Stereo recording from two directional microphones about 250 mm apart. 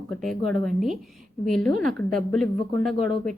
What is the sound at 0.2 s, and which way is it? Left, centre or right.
A woman's voice, centre.